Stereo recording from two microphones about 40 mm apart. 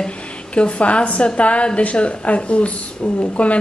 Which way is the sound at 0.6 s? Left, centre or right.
Left.